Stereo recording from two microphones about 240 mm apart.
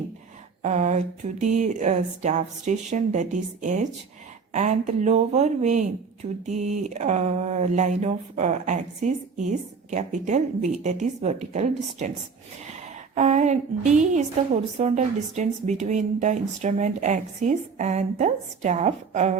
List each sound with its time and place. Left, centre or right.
0.6 s a woman's voice: right
13.1 s a woman's voice: right